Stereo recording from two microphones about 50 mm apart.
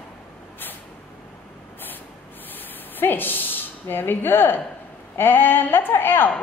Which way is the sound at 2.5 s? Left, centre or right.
Left.